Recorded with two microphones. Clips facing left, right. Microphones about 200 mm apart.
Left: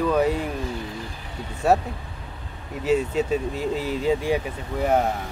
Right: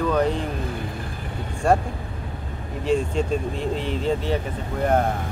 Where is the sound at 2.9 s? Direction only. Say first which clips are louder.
Left 1 dB; 5° left (ahead or behind).